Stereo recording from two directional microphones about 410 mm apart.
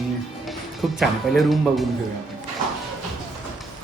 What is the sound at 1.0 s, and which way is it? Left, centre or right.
Speech, centre.